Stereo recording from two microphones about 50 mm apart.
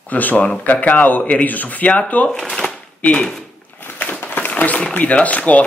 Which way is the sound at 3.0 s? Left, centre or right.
Left.